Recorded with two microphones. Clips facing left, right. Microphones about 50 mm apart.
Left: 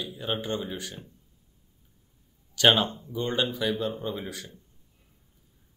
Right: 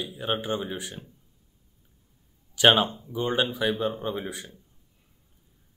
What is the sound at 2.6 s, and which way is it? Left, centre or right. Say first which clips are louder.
A man's voice: right 2 dB; centre.